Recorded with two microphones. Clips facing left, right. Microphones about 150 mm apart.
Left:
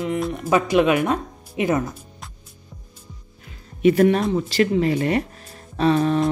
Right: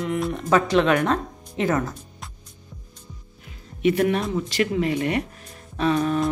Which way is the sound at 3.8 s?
40° left (ahead or behind).